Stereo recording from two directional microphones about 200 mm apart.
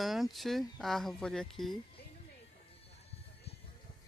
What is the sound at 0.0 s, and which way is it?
Speech, centre (ahead or behind).